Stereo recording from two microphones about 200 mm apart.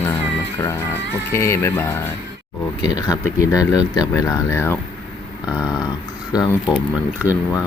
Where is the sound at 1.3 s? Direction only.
15° left (ahead or behind).